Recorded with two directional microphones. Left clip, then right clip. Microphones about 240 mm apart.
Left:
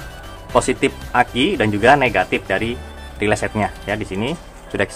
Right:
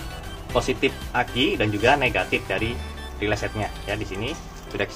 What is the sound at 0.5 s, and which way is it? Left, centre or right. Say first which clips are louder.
Speech: left 6 dB; left.